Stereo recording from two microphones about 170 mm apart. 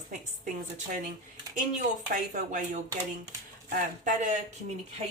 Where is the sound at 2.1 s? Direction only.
50° right (ahead or behind).